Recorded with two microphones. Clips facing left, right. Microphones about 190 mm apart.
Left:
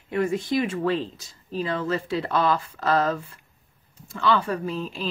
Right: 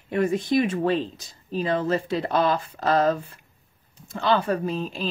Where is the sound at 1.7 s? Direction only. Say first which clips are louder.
Right 3 dB; 45° right (ahead or behind).